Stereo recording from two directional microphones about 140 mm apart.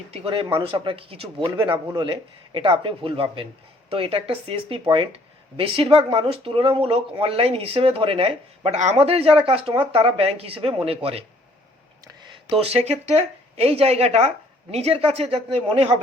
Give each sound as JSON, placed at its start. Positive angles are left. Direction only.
{"t": 0.1, "sound": "speech", "side_deg": -40}